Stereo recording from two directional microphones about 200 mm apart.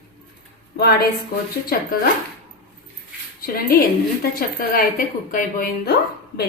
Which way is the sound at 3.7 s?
50° left (ahead or behind).